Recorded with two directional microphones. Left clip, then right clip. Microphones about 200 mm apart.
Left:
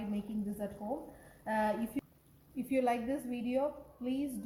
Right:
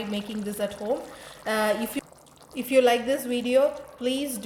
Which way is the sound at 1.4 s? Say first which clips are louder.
Right 9 dB; 45° right (ahead or behind).